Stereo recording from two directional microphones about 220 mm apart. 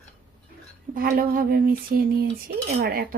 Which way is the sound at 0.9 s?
40° right (ahead or behind).